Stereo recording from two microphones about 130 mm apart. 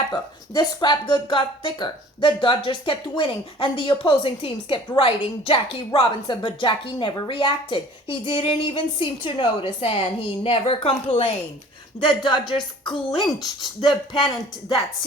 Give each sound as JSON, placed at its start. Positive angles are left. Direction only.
{"t": 0.1, "sound": "speech", "side_deg": 30}